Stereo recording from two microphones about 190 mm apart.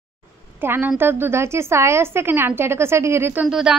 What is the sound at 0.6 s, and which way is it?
A woman's voice, 10° right (ahead or behind).